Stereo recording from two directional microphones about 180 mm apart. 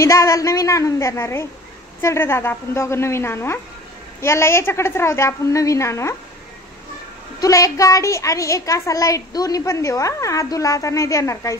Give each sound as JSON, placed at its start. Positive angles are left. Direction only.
{"t": 0.0, "sound": "speech", "side_deg": 15}
{"t": 7.3, "sound": "speech", "side_deg": 20}